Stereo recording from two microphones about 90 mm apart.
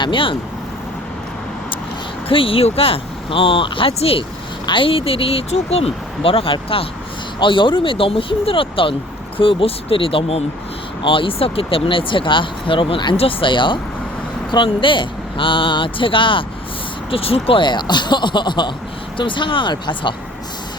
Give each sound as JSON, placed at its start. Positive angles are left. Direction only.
{"t": 0.0, "sound": "speech", "side_deg": 70}
{"t": 2.3, "sound": "speech", "side_deg": 90}
{"t": 4.6, "sound": "speech", "side_deg": 70}
{"t": 7.3, "sound": "speech", "side_deg": 65}
{"t": 17.1, "sound": "speech", "side_deg": 90}